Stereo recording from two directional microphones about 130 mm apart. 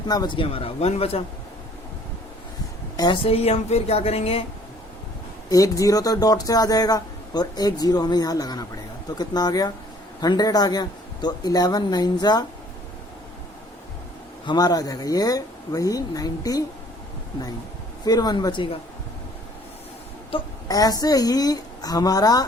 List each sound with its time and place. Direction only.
0.1 s speech: 35° left (ahead or behind); by 1.2 s 50° left (ahead or behind)
3.2 s speech: 50° left (ahead or behind)
5.5 s a man's voice: 25° left (ahead or behind)
14.4 s speech: 30° left (ahead or behind)
18.0 s a man's voice: 30° left (ahead or behind)
20.3 s speech: 45° left (ahead or behind)
20.7 s speech: 30° left (ahead or behind)